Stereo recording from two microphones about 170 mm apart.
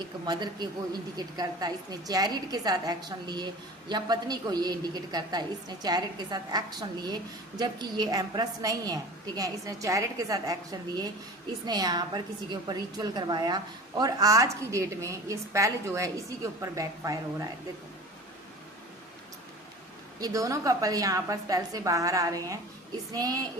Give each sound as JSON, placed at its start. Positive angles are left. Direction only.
{"t": 0.0, "sound": "a woman's voice", "side_deg": -25}
{"t": 20.2, "sound": "a woman's voice", "side_deg": -20}